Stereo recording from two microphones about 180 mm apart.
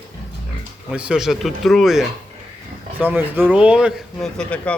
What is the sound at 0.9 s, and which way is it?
A man's voice, 5° right (ahead or behind).